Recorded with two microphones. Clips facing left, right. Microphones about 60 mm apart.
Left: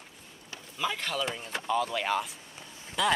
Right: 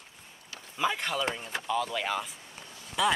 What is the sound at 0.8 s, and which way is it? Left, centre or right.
Speech, centre.